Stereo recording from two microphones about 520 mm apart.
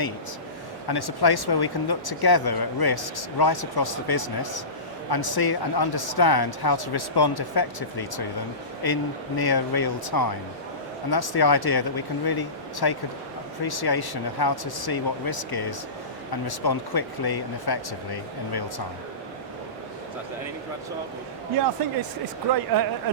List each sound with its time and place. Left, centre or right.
0.9 s speech: left
22.7 s a man's voice: right